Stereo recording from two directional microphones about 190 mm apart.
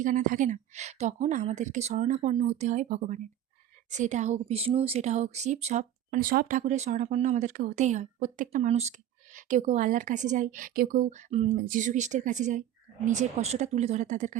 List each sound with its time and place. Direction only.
0.0 s speech: 45° right (ahead or behind)
11.5 s speech: 50° right (ahead or behind)